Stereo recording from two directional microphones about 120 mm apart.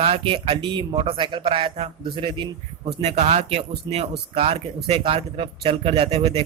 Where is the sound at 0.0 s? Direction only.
50° right (ahead or behind).